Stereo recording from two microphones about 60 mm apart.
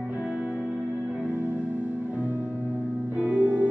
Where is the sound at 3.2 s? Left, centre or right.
Right.